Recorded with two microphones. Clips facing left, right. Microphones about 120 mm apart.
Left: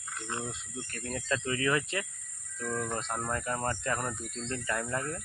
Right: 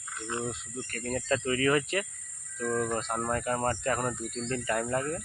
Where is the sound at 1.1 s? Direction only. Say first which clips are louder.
Right 4 dB; 40° right (ahead or behind).